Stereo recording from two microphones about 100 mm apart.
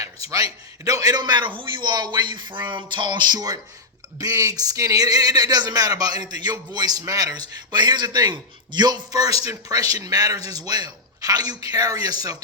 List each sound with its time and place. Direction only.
0.0 s a man's voice: 35° right (ahead or behind)